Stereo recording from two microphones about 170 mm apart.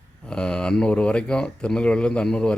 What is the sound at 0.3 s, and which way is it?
Speech, 5° left (ahead or behind).